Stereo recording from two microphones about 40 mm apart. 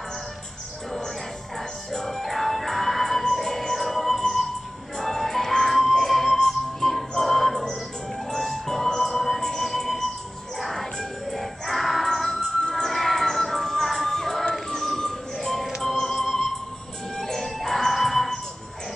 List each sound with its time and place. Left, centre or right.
1.9 s music: centre
9.4 s music: centre
12.4 s music: centre
15.0 s a sound: centre
15.8 s music: centre